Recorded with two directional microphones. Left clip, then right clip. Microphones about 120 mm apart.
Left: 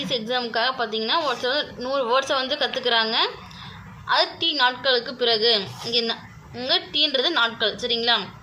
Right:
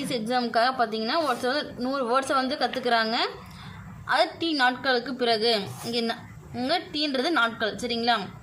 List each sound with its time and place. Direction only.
0.1 s a woman's voice: 30° right (ahead or behind)